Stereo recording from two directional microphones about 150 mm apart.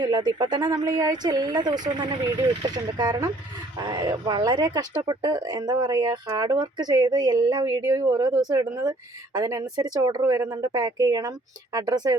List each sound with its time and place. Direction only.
0.0 s speech: 30° right (ahead or behind)